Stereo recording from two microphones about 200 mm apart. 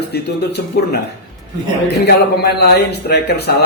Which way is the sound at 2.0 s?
55° left (ahead or behind).